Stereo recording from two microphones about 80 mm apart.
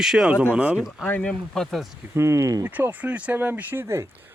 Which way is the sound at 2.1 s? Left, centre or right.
Right.